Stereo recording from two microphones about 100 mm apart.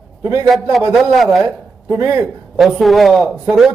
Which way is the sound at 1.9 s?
25° right (ahead or behind).